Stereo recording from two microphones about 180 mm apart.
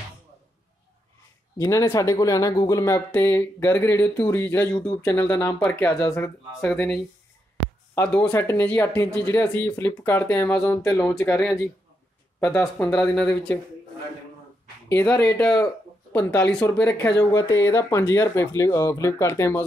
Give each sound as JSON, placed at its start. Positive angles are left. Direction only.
{"t": 1.6, "sound": "speech", "side_deg": 15}
{"t": 7.9, "sound": "speech", "side_deg": 10}
{"t": 14.9, "sound": "speech", "side_deg": 10}